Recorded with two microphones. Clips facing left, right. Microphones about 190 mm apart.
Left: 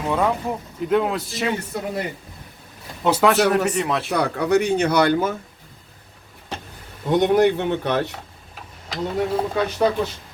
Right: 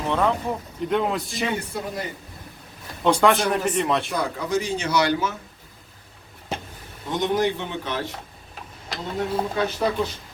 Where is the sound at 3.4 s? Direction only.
70° left (ahead or behind).